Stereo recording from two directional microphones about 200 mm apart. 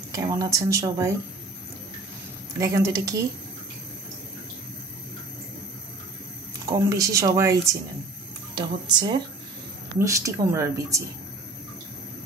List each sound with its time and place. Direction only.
0.1 s speech: 15° right (ahead or behind)
2.6 s speech: 15° right (ahead or behind)
6.6 s speech: 15° right (ahead or behind)
8.5 s speech: 20° right (ahead or behind)